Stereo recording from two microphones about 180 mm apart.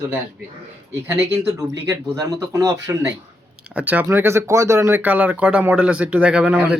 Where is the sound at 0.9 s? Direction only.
15° right (ahead or behind).